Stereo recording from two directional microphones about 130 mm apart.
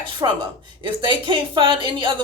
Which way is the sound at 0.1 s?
40° right (ahead or behind).